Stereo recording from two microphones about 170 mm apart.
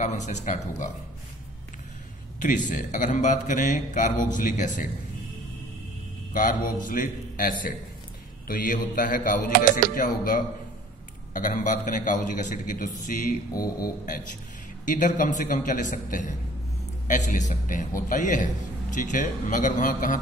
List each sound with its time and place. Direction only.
0.0 s a man's voice: 45° left (ahead or behind)
2.4 s a man's voice: 50° left (ahead or behind)
6.3 s a man's voice: 55° left (ahead or behind)